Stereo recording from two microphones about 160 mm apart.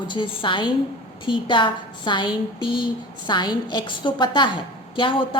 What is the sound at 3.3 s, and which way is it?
A woman's voice, 25° left (ahead or behind).